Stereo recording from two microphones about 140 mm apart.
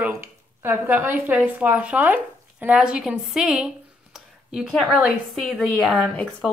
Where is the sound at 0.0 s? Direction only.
15° right (ahead or behind).